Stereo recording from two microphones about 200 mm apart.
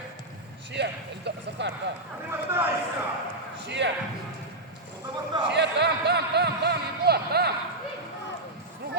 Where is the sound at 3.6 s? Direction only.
60° right (ahead or behind).